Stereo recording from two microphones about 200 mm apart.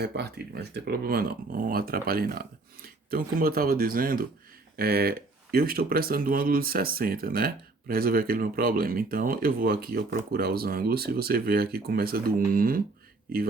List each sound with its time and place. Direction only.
0.0 s speech: 55° right (ahead or behind)